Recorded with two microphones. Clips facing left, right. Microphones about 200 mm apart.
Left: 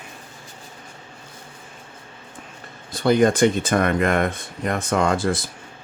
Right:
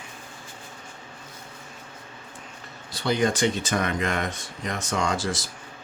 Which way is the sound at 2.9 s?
50° left (ahead or behind).